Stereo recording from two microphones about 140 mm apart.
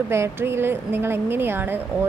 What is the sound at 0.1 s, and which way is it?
Speech, 15° right (ahead or behind).